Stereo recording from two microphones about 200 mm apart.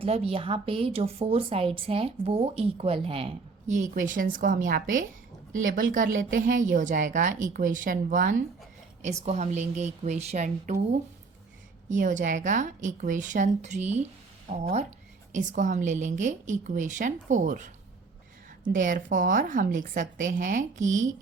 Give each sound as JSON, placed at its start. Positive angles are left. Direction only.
{"t": 0.0, "sound": "a woman's voice", "side_deg": -30}
{"t": 11.9, "sound": "a woman's voice", "side_deg": -40}